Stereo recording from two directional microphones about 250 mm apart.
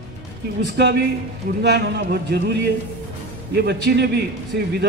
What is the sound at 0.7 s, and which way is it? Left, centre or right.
A man's voice, right.